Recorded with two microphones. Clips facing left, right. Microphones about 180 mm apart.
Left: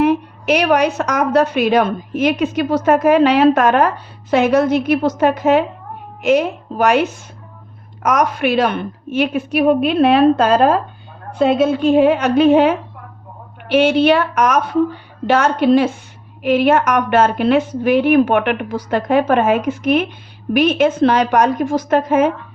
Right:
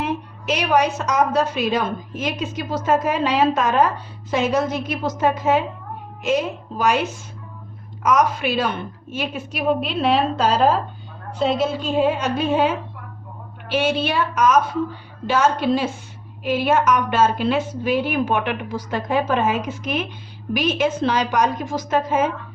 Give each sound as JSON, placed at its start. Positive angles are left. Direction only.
{"t": 0.0, "sound": "a woman's voice", "side_deg": 65}